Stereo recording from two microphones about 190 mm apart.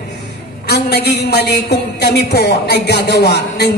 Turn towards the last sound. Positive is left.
turn(degrees=60)  # may be behind; listen again after turning